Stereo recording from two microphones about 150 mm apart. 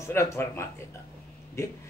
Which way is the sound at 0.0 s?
15° left (ahead or behind).